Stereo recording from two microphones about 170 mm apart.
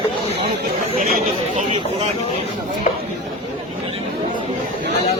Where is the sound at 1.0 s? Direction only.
50° right (ahead or behind).